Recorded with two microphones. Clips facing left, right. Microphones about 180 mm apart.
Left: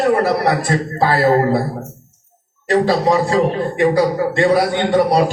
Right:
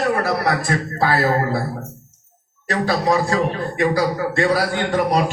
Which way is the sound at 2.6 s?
30° left (ahead or behind).